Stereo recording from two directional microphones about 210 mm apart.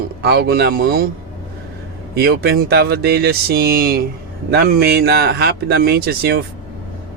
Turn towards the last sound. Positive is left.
turn(degrees=-45)  # may be behind; listen again after turning